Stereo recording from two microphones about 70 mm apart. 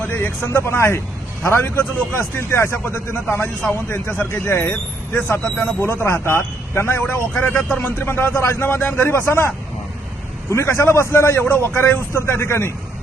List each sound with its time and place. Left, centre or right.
0.1 s a man's voice: left
7.3 s a man's voice: left
10.5 s a man's voice: left